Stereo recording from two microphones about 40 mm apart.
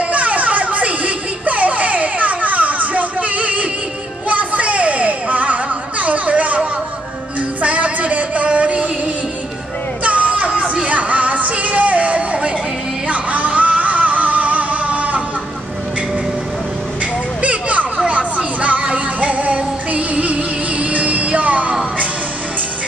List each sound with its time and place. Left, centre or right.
0.1 s music: right
7.6 s a sound: right
10.0 s a sound: right
10.9 s music: right
17.4 s children playing: right
18.0 s music: right